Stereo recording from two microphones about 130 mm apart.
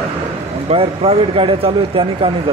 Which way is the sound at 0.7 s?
50° right (ahead or behind).